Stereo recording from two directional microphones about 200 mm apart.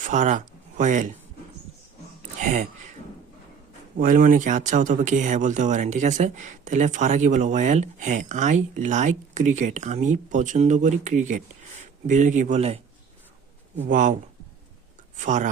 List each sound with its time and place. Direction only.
0.0 s speech: 40° right (ahead or behind)
2.4 s speech: 35° right (ahead or behind)
3.9 s speech: 45° right (ahead or behind)
13.8 s speech: 40° right (ahead or behind)